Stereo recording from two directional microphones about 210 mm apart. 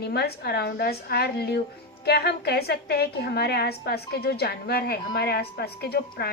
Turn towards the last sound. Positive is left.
turn(degrees=50)  # may be behind; listen again after turning